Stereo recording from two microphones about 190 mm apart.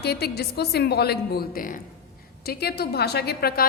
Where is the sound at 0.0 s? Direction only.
55° left (ahead or behind).